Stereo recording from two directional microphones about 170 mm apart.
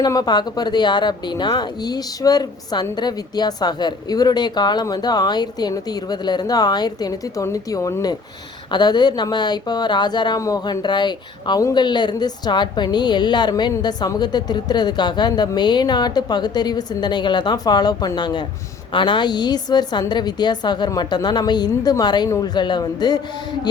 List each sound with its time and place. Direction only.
0.0 s speech: 25° left (ahead or behind)